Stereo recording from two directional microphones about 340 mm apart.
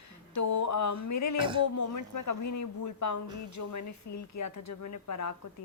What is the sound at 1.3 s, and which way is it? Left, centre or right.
Speech, centre.